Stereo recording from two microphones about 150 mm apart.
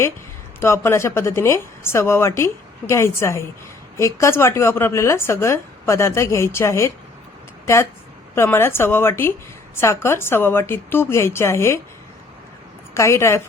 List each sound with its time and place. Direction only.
0.6 s a woman's voice: 20° left (ahead or behind)
8.4 s a woman's voice: 15° left (ahead or behind)
12.9 s a woman's voice: 20° left (ahead or behind)